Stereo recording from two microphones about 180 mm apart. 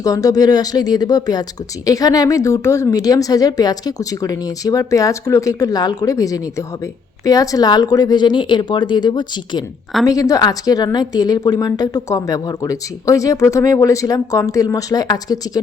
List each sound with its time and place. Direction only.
0.0 s speech: 20° left (ahead or behind)